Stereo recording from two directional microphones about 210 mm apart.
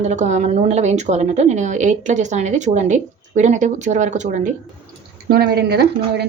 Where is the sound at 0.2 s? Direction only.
35° right (ahead or behind).